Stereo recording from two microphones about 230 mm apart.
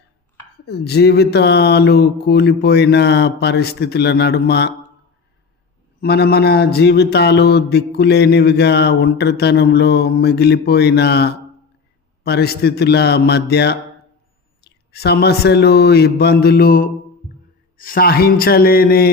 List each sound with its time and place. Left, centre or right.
0.6 s speech: left
6.0 s a man's voice: left